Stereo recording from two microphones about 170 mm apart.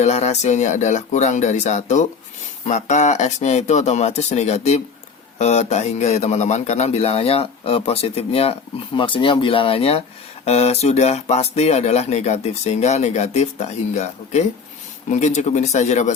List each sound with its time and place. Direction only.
0.0 s speech: 40° left (ahead or behind)